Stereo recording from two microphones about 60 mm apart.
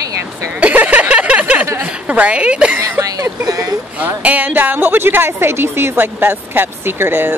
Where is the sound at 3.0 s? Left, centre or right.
Right.